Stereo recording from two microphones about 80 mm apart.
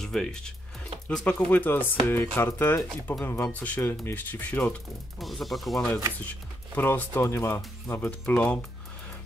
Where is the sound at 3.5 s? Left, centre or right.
Centre.